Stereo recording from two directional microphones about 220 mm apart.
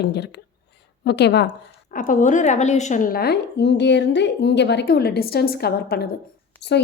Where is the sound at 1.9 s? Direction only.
35° left (ahead or behind).